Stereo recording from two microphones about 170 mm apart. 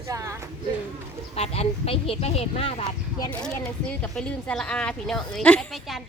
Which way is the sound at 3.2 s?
5° left (ahead or behind).